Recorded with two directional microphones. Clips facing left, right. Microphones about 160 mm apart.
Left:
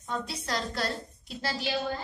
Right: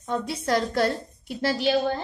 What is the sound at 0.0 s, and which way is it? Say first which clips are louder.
A woman's voice: right 7 dB; 60° right (ahead or behind).